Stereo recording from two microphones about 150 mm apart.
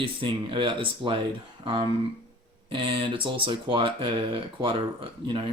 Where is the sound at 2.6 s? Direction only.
35° right (ahead or behind).